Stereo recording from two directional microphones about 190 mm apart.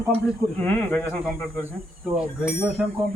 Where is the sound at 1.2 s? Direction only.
5° right (ahead or behind).